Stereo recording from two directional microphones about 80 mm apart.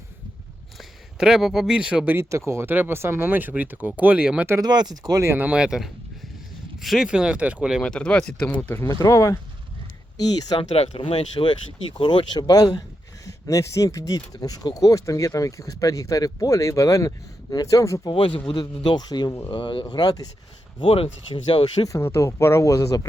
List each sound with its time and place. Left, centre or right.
0.8 s speech: centre
2.0 s speech: right; by 4.4 s centre
4.6 s speech: right
5.4 s speech: centre
7.8 s speech: centre
9.0 s speech: left
10.2 s speech: left
11.4 s speech: left
11.9 s speech: left
13.2 s speech: left
18.0 s speech: left
19.5 s speech: left
21.8 s speech: left